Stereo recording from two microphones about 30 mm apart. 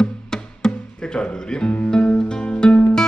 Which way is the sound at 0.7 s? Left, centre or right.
Left.